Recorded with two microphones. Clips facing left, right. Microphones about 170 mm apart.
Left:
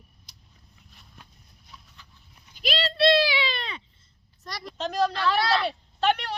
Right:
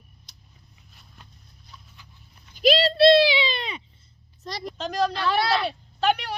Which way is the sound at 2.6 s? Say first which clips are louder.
Right 7 dB; 40° right (ahead or behind).